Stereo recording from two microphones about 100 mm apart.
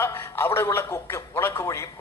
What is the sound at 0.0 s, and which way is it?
A man's voice, 25° left (ahead or behind).